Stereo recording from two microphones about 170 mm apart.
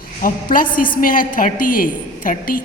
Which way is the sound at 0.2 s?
55° left (ahead or behind).